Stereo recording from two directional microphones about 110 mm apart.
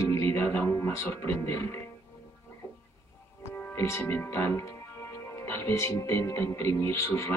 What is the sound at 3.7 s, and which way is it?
Speech, 25° left (ahead or behind).